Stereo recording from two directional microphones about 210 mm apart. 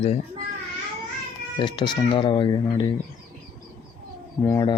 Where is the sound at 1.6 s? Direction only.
20° left (ahead or behind).